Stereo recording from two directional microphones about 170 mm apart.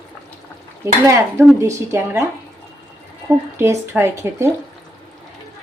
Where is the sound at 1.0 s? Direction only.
15° right (ahead or behind).